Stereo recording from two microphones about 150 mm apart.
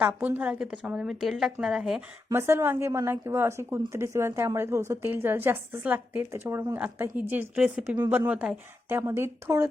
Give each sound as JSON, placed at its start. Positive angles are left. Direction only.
{"t": 0.0, "sound": "a woman's voice", "side_deg": -10}
{"t": 2.3, "sound": "a woman's voice", "side_deg": -15}